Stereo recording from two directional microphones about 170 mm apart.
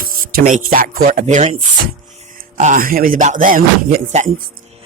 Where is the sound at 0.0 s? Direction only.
55° right (ahead or behind).